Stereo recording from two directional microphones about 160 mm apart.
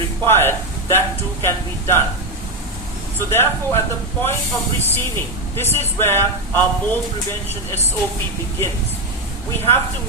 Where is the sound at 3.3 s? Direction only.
15° left (ahead or behind).